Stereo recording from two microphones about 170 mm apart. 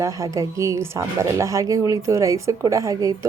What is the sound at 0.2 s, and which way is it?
A woman's voice, 20° right (ahead or behind).